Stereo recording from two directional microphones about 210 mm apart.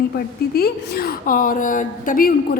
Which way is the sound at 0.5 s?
45° left (ahead or behind).